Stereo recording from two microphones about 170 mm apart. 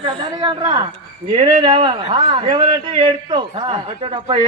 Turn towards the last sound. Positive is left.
turn(degrees=-35)  # may be behind; listen again after turning